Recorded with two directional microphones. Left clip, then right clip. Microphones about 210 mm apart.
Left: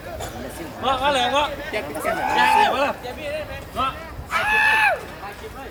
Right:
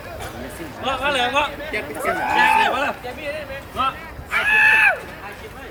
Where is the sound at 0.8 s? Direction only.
40° left (ahead or behind).